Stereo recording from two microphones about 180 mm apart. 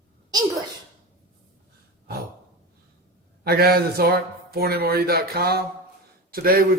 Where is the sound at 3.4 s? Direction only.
60° right (ahead or behind).